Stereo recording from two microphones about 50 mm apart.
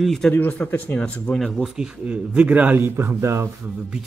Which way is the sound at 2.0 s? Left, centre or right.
Right.